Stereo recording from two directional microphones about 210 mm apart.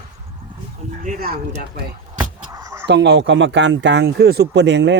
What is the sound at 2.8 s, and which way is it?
Speech, 55° right (ahead or behind).